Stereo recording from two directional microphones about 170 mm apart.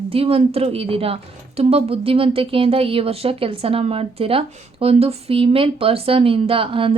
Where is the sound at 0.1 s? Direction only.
35° right (ahead or behind).